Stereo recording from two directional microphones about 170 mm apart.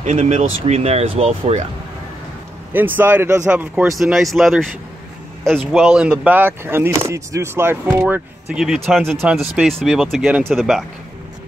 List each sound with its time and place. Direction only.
0.0 s speech: 40° right (ahead or behind)
2.7 s speech: 10° right (ahead or behind)
4.0 s speech: centre (ahead or behind)